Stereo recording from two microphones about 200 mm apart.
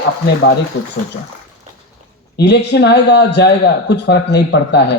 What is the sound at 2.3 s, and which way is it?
A man's voice, 55° left (ahead or behind).